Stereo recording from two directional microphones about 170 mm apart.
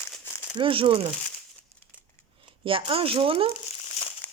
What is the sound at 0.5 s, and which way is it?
Speech, 30° right (ahead or behind).